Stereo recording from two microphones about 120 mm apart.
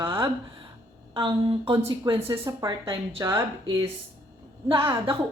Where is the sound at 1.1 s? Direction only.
45° right (ahead or behind).